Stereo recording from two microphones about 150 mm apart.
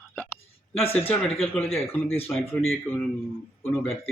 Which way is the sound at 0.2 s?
10° left (ahead or behind).